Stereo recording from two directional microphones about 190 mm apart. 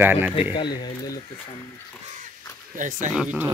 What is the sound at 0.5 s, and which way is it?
Speech, 20° left (ahead or behind).